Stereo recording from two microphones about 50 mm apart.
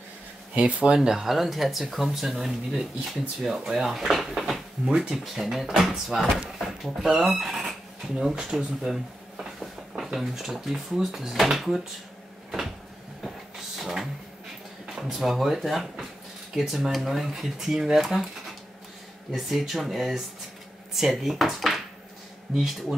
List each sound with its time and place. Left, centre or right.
0.6 s speech: right
0.9 s speech: centre
13.7 s vehicle: centre
15.0 s speech: centre
19.3 s speech: centre